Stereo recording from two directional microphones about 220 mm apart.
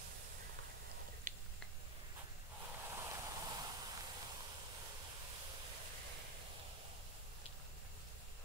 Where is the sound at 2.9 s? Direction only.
15° right (ahead or behind).